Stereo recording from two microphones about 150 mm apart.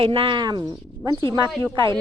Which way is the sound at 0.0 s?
35° right (ahead or behind).